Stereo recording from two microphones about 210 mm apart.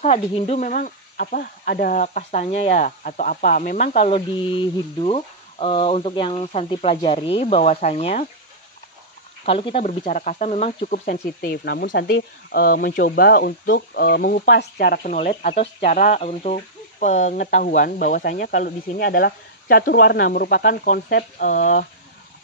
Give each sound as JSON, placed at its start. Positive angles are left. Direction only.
{"t": 0.0, "sound": "speech", "side_deg": 30}
{"t": 4.0, "sound": "speech", "side_deg": 25}
{"t": 9.4, "sound": "speech", "side_deg": 25}
{"t": 15.2, "sound": "speech", "side_deg": 30}